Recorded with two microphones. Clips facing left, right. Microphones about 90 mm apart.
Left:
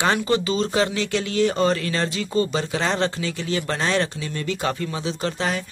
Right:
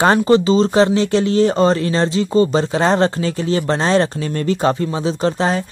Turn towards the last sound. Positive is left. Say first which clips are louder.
# right 7 dB
turn(degrees=-35)  # may be behind; listen again after turning